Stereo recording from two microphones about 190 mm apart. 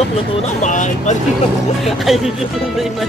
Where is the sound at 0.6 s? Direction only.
40° left (ahead or behind).